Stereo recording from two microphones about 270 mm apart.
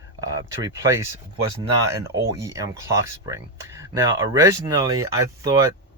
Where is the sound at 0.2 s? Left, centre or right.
Centre.